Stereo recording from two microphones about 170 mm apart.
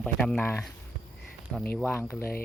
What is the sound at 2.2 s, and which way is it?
Speech, 60° left (ahead or behind).